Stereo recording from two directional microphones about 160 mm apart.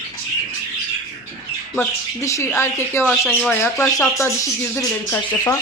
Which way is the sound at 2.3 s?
15° left (ahead or behind).